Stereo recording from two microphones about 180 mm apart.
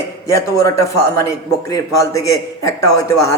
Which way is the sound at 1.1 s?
20° left (ahead or behind).